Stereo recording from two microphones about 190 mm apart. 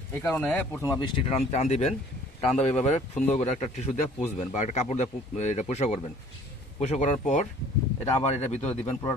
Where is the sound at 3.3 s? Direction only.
35° left (ahead or behind).